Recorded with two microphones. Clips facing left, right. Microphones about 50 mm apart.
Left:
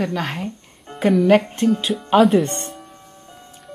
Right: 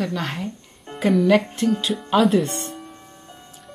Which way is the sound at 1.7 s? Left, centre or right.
Centre.